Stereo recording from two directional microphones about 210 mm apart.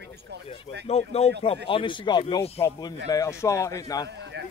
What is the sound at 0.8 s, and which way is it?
Speech, 30° left (ahead or behind).